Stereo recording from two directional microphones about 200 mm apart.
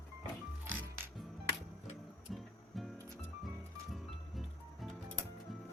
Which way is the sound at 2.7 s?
Centre (ahead or behind).